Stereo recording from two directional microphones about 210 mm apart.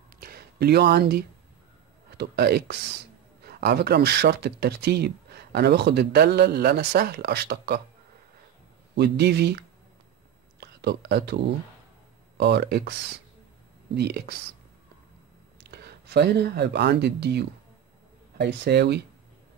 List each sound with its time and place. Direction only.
0.2 s a sound: 45° right (ahead or behind)
2.0 s speech: 50° right (ahead or behind)
8.9 s speech: 50° right (ahead or behind)
10.6 s speech: 50° right (ahead or behind)
13.9 s speech: 50° right (ahead or behind)
15.6 s speech: 50° right (ahead or behind)